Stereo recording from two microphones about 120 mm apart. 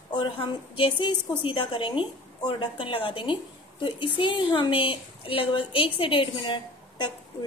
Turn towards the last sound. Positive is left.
turn(degrees=40)  # may be behind; listen again after turning